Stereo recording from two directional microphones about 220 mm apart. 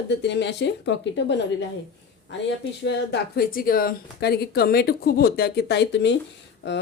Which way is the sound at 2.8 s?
45° left (ahead or behind).